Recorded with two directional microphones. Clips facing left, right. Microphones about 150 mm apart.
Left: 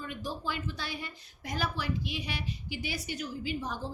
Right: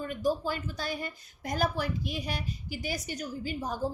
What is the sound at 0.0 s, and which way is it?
A woman's voice, 45° right (ahead or behind).